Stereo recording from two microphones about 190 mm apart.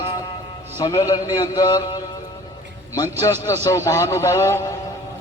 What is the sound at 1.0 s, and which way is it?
A man's voice, 15° left (ahead or behind).